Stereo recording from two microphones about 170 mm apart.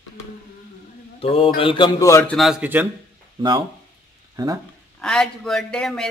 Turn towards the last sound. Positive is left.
turn(degrees=5)  # may be behind; listen again after turning